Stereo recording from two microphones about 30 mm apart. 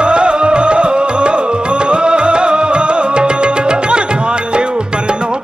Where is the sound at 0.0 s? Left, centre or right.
Right.